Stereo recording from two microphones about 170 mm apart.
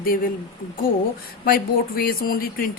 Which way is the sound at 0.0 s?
60° left (ahead or behind).